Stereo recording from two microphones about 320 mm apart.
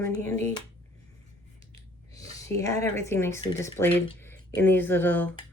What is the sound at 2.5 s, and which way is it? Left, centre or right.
Speech, centre.